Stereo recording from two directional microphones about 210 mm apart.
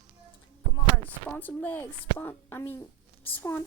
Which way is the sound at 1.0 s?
10° left (ahead or behind).